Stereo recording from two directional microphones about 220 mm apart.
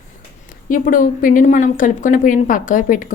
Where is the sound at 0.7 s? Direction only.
40° left (ahead or behind).